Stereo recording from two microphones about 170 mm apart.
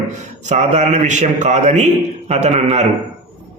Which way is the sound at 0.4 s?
45° right (ahead or behind).